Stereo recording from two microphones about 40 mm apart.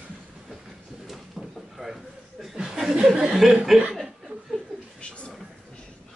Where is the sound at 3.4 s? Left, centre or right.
Centre.